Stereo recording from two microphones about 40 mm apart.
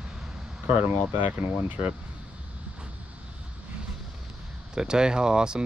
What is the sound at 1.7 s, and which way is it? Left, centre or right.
Speech, right.